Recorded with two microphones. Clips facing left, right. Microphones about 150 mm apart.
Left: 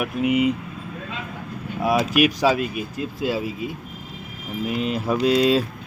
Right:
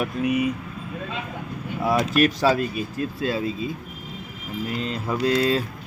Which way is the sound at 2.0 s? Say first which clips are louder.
Even; 10° left (ahead or behind).